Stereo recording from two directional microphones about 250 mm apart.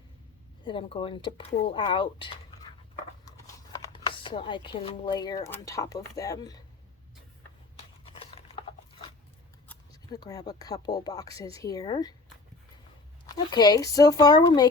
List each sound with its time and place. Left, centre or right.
0.6 s speech: centre
8.1 s a sound: left
9.6 s speech: centre
13.2 s speech: centre